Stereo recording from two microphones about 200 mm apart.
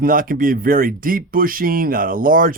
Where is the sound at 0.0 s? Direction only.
45° right (ahead or behind).